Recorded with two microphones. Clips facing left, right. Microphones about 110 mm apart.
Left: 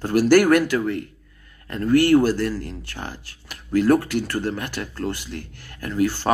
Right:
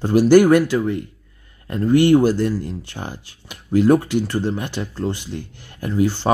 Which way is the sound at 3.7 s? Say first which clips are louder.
Right 3 dB; 15° right (ahead or behind).